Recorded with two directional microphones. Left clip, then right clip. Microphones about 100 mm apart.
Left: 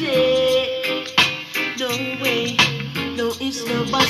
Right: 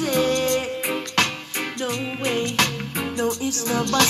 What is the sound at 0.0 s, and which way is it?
Music, 65° right (ahead or behind).